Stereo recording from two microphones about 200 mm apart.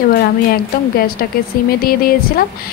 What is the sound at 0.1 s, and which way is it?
Speech, 50° left (ahead or behind).